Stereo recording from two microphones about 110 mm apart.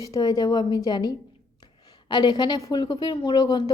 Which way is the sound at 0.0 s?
35° left (ahead or behind).